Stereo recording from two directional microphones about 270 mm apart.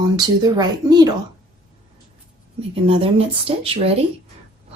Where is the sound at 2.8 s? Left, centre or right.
Right.